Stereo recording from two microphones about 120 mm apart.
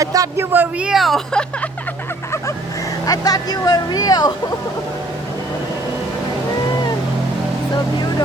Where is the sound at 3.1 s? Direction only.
30° left (ahead or behind).